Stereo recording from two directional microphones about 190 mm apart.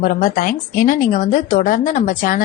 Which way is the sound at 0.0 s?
45° left (ahead or behind).